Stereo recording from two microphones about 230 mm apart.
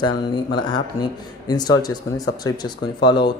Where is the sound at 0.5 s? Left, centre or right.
Centre.